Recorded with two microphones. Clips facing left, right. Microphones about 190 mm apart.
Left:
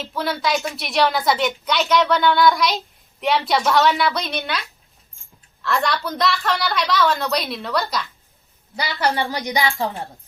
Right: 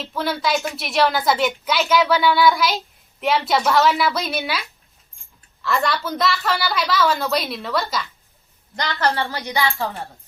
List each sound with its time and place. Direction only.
0.0 s a woman's voice: centre (ahead or behind); by 10.1 s 15° left (ahead or behind)